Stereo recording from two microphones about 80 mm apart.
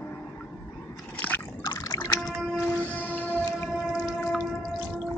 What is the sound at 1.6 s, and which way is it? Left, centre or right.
Liquid, left.